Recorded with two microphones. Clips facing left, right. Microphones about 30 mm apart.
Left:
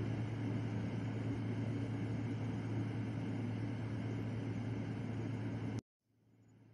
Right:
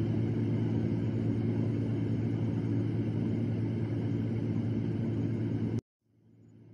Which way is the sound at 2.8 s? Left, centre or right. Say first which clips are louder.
Right 9 dB; right.